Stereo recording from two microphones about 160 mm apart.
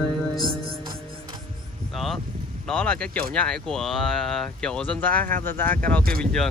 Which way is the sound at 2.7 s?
5° left (ahead or behind).